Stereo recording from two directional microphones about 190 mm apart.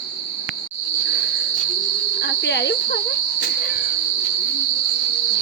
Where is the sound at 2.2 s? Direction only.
65° left (ahead or behind).